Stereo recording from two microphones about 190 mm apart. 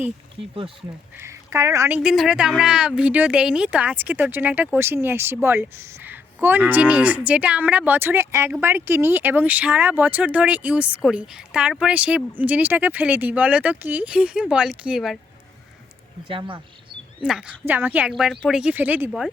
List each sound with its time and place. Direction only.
1.2 s speech: 15° right (ahead or behind)
2.0 s speech: centre (ahead or behind)
16.3 s speech: 25° right (ahead or behind)
17.2 s speech: 5° right (ahead or behind)